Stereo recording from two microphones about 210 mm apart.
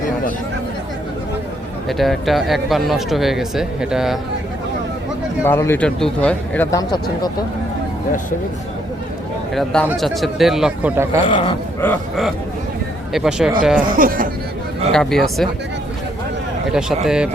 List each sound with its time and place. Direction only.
1.9 s speech: centre (ahead or behind)
5.4 s speech: 10° left (ahead or behind)
9.6 s speech: 5° left (ahead or behind)
11.8 s speech: 5° left (ahead or behind)
13.9 s speech: 40° right (ahead or behind)
14.9 s speech: centre (ahead or behind)
16.7 s speech: 5° right (ahead or behind)